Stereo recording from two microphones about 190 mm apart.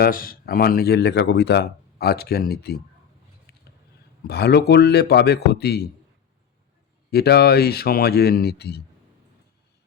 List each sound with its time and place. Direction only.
0.0 s speech: 50° left (ahead or behind)
3.5 s a sound: 55° left (ahead or behind)
4.3 s speech: 60° left (ahead or behind)
7.1 s speech: 55° left (ahead or behind)